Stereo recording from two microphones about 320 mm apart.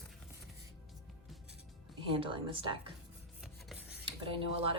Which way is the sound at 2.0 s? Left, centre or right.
Centre.